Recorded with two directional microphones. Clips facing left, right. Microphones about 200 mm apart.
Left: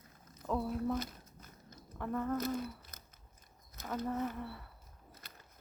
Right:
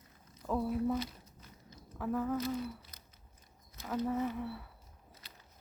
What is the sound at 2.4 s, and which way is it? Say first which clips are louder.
Humming: even; 50° left (ahead or behind).